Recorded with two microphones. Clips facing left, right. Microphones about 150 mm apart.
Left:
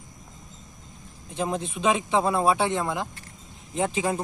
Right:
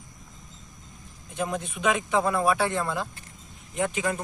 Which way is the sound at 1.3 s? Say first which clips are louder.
Left 2 dB; 30° left (ahead or behind).